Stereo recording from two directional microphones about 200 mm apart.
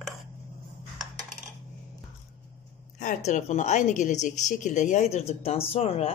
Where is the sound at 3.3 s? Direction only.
35° left (ahead or behind).